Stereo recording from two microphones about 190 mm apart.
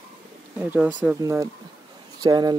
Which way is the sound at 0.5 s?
10° right (ahead or behind).